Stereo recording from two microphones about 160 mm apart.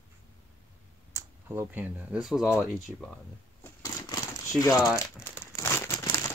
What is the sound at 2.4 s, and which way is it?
Speech, 15° left (ahead or behind).